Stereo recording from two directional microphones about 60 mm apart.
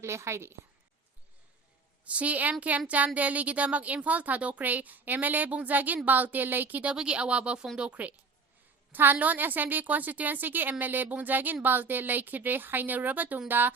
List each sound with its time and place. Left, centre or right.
0.0 s a woman's voice: right
2.0 s a woman's voice: right
6.9 s a woman's voice: centre
8.9 s a woman's voice: right